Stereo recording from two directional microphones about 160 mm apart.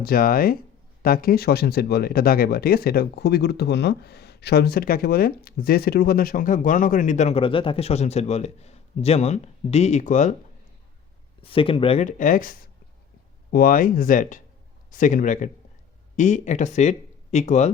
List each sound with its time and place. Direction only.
0.0 s speech: 65° left (ahead or behind); by 10.3 s 50° left (ahead or behind)
11.4 s speech: 35° left (ahead or behind)
12.0 s a man's voice: 55° left (ahead or behind)